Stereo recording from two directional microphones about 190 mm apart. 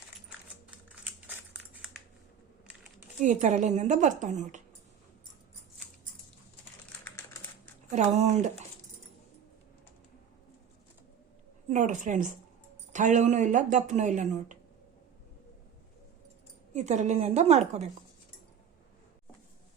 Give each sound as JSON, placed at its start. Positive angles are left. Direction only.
{"t": 1.0, "sound": "a sound", "side_deg": -5}
{"t": 3.2, "sound": "speech", "side_deg": -40}
{"t": 7.9, "sound": "speech", "side_deg": -40}
{"t": 11.7, "sound": "speech", "side_deg": -40}
{"t": 16.7, "sound": "speech", "side_deg": -40}